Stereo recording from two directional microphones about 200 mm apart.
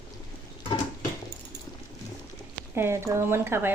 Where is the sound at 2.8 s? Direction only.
10° right (ahead or behind).